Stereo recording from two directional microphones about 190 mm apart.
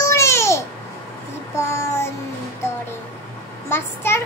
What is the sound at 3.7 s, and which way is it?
Speech, 10° left (ahead or behind).